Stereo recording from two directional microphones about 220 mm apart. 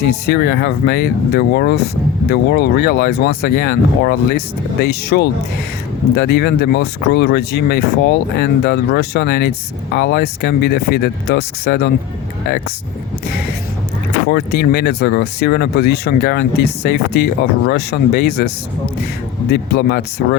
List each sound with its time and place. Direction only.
0.1 s speech: 45° left (ahead or behind)
14.3 s speech: 45° left (ahead or behind)